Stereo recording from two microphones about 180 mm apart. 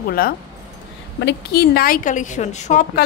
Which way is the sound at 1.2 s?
60° left (ahead or behind).